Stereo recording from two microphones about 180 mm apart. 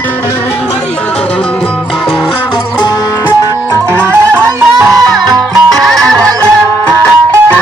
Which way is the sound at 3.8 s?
15° right (ahead or behind).